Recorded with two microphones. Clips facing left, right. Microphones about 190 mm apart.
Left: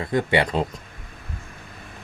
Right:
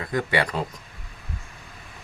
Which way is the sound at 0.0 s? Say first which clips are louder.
Left 3 dB; 25° left (ahead or behind).